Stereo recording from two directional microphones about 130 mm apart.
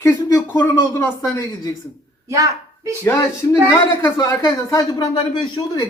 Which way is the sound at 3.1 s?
25° left (ahead or behind).